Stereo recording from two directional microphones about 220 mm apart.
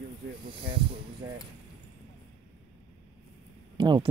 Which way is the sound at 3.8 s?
20° right (ahead or behind).